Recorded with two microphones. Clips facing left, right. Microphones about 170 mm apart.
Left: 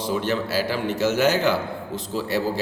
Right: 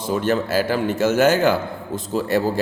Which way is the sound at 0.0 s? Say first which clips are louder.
Right 3 dB; 50° right (ahead or behind).